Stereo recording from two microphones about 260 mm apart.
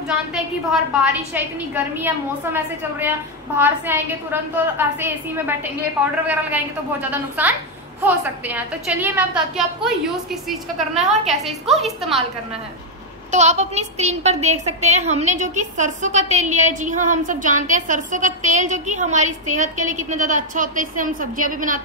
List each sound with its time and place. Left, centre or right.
0.7 s a woman's voice: centre
13.3 s a woman's voice: right